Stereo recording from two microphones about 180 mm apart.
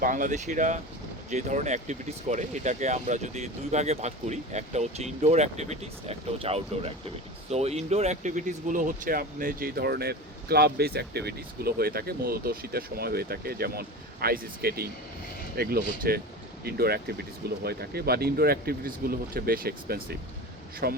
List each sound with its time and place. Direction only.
0.0 s speech: 50° right (ahead or behind)